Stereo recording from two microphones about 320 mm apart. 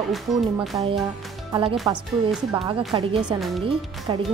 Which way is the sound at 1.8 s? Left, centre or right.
Centre.